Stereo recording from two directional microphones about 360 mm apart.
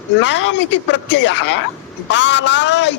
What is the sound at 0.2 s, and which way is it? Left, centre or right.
Speech, left.